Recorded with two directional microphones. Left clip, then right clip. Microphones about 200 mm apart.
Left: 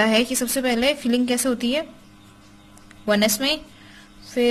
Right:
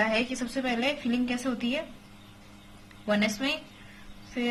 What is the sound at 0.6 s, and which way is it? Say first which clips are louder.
A woman's voice: left 7 dB; 55° left (ahead or behind).